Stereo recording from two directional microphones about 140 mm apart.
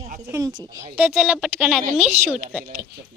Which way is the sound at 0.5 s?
35° right (ahead or behind).